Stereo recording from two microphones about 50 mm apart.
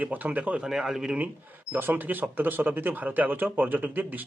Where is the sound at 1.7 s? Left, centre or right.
Right.